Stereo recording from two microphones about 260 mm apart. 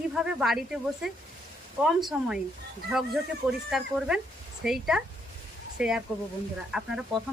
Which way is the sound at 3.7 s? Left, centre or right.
Centre.